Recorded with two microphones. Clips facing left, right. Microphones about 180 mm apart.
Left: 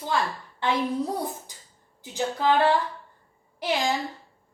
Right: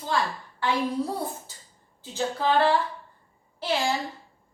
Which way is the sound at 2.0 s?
15° left (ahead or behind).